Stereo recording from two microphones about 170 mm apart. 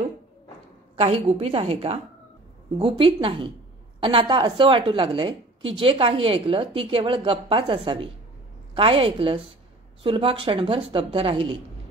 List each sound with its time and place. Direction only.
0.9 s a woman's voice: 35° right (ahead or behind)